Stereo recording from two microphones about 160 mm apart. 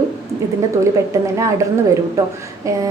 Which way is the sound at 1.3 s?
20° right (ahead or behind).